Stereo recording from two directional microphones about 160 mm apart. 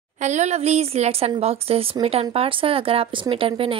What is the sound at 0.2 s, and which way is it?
Speech, 45° right (ahead or behind).